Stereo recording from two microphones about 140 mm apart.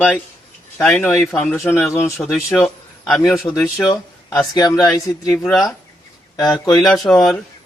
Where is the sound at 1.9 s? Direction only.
15° left (ahead or behind).